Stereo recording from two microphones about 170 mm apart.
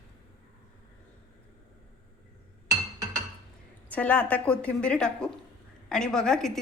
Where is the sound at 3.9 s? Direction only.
10° left (ahead or behind).